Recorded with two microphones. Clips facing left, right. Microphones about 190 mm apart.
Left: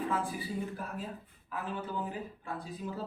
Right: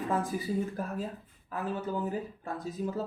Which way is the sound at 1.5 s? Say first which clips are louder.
Right 4 dB; 40° right (ahead or behind).